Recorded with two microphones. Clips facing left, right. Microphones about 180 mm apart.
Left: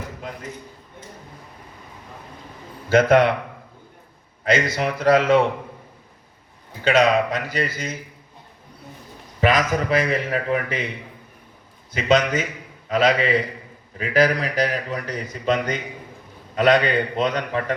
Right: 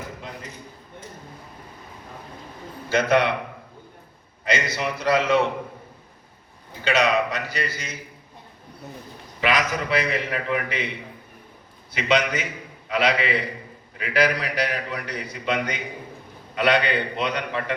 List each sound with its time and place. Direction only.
2.9 s a man's voice: 50° left (ahead or behind)
4.4 s a man's voice: 45° left (ahead or behind)
6.9 s a man's voice: 50° left (ahead or behind)
9.4 s a man's voice: 45° left (ahead or behind)
11.9 s a man's voice: 45° left (ahead or behind)